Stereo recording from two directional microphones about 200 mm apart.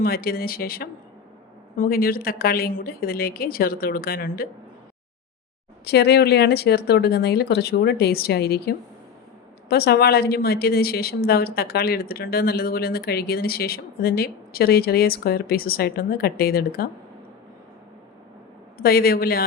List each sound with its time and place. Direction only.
0.0 s a woman's voice: 50° left (ahead or behind)
5.8 s a woman's voice: 55° left (ahead or behind)
18.8 s a woman's voice: 50° left (ahead or behind)